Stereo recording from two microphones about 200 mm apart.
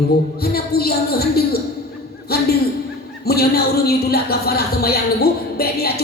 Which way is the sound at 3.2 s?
50° left (ahead or behind).